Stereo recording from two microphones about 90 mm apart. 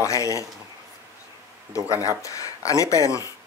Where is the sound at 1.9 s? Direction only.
35° left (ahead or behind).